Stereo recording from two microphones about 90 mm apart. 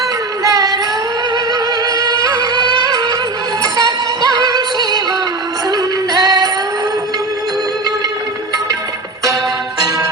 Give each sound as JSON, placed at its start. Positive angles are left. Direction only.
{"t": 0.4, "sound": "music", "side_deg": -40}
{"t": 9.2, "sound": "music", "side_deg": -45}